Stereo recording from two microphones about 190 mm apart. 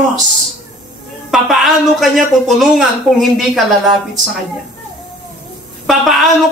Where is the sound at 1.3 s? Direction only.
Centre (ahead or behind).